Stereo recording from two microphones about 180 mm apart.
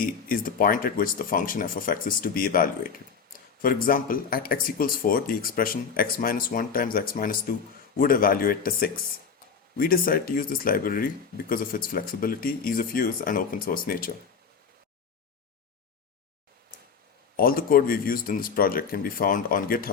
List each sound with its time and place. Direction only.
0.0 s speech: 50° left (ahead or behind)
17.3 s speech: 55° left (ahead or behind)